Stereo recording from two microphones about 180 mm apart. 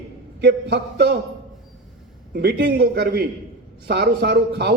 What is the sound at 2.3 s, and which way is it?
A man's voice, 60° right (ahead or behind).